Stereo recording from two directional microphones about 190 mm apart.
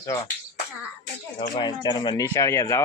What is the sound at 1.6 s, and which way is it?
Speech, 20° left (ahead or behind).